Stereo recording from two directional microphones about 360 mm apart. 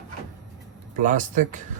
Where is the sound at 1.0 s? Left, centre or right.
Right.